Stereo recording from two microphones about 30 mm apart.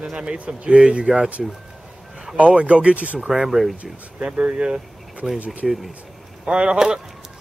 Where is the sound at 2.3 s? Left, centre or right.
Right.